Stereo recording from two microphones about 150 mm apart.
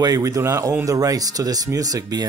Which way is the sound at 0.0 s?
25° right (ahead or behind).